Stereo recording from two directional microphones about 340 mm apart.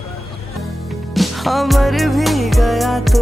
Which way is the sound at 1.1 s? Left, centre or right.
Centre.